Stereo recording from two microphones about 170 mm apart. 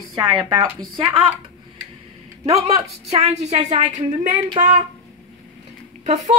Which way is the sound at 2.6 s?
40° right (ahead or behind).